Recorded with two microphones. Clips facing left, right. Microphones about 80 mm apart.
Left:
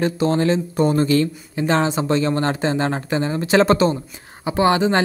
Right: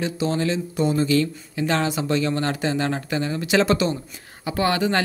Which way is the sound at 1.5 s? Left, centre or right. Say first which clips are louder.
Left 4 dB; left.